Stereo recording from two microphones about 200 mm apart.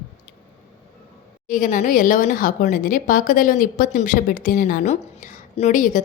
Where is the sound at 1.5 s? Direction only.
40° left (ahead or behind).